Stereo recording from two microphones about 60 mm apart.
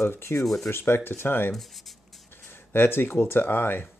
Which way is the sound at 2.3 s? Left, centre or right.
Left.